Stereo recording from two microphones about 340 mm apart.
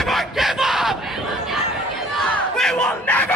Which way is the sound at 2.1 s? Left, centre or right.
Centre.